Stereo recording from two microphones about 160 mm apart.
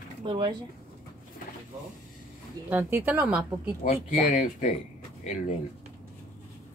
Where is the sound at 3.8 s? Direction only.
55° left (ahead or behind).